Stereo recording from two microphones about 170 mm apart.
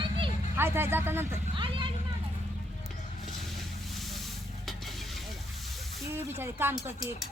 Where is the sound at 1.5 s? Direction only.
30° right (ahead or behind).